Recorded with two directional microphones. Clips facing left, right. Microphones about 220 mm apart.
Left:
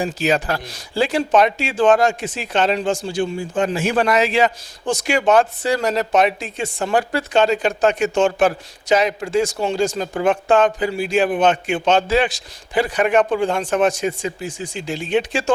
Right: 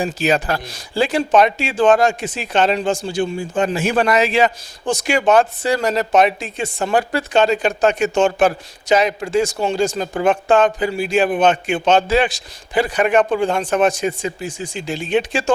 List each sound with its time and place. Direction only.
0.0 s speech: 15° right (ahead or behind)